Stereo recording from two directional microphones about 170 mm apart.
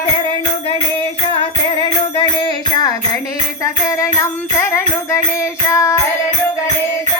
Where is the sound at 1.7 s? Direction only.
30° left (ahead or behind).